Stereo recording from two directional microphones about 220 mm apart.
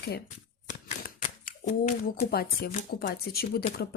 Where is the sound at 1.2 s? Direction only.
35° left (ahead or behind).